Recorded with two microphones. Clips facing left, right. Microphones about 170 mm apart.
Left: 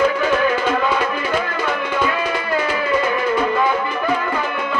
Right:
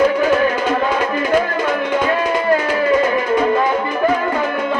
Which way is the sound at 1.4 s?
40° right (ahead or behind).